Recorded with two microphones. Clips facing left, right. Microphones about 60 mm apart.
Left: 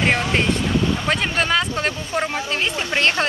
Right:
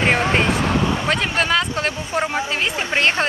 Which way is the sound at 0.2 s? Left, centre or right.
Right.